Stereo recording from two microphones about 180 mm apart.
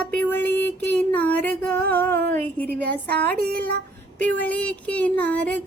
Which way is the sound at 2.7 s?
60° right (ahead or behind).